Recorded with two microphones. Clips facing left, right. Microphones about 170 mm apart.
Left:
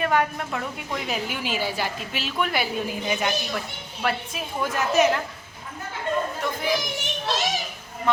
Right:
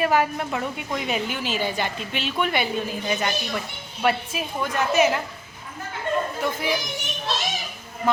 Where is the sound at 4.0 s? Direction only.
Centre (ahead or behind).